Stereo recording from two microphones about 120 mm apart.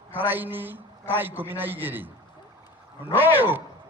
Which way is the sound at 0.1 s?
15° right (ahead or behind).